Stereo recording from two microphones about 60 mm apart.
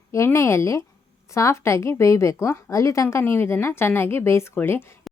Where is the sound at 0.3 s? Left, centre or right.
Left.